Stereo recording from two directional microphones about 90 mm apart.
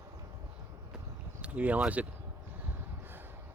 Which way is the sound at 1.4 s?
15° right (ahead or behind).